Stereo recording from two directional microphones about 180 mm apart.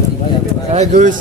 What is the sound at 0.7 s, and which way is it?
Speech, 40° right (ahead or behind).